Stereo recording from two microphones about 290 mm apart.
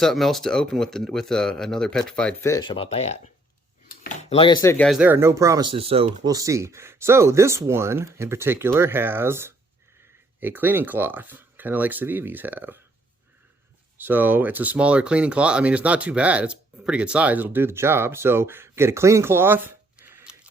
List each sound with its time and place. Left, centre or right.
0.0 s speech: centre; by 3.2 s left
3.8 s dishes: left
4.4 s speech: centre
14.0 s speech: centre